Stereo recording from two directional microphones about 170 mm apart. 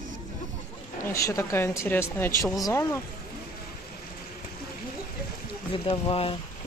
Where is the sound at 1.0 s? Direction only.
20° left (ahead or behind).